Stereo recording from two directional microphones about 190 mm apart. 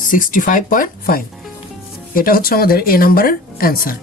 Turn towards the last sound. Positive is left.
turn(degrees=50)  # may be behind; listen again after turning